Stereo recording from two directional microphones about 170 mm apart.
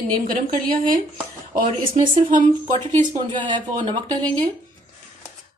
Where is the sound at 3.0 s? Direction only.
30° right (ahead or behind).